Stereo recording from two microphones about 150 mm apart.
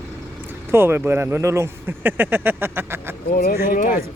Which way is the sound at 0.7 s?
15° right (ahead or behind).